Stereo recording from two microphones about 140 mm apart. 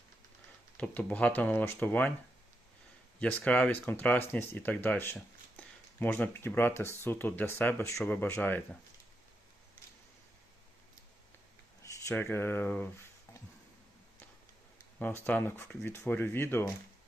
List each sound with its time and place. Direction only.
0.8 s speech: 10° left (ahead or behind)
3.2 s speech: 10° left (ahead or behind)
11.8 s speech: 20° left (ahead or behind)
14.9 s speech: 10° left (ahead or behind)